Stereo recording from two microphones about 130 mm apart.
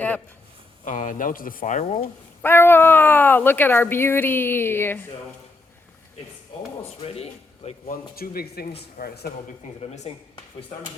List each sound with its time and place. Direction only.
0.9 s speech: 80° left; by 2.0 s 55° left (ahead or behind)
2.4 s speech: 15° left (ahead or behind)
7.0 s speech: 50° left (ahead or behind)
7.9 s speech: 90° left
9.8 s speech: 60° left (ahead or behind)